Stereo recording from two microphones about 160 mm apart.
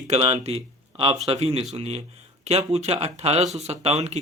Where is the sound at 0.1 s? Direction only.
40° right (ahead or behind).